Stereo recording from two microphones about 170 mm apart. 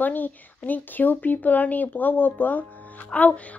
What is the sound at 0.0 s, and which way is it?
A woman's voice, 10° left (ahead or behind).